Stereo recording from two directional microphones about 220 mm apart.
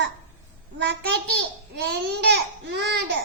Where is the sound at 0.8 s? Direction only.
50° right (ahead or behind).